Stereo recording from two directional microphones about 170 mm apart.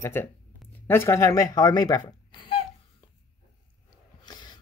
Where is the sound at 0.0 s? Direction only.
15° left (ahead or behind).